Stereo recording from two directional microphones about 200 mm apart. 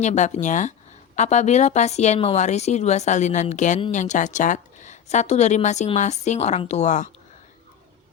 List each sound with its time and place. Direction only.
0.0 s a woman's voice: 35° left (ahead or behind)